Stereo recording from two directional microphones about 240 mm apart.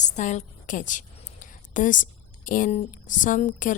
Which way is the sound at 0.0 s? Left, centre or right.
Left.